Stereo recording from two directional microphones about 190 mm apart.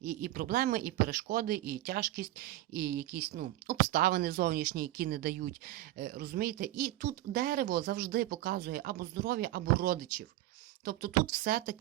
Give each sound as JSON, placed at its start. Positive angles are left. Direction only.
{"t": 0.0, "sound": "speech", "side_deg": -45}